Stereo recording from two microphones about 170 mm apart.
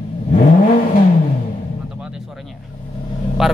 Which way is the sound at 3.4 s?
Centre (ahead or behind).